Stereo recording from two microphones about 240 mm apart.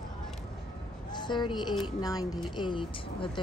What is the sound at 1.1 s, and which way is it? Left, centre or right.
A woman's voice, centre.